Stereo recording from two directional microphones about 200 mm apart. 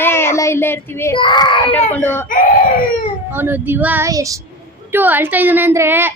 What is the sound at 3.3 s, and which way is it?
A woman's voice, 10° right (ahead or behind).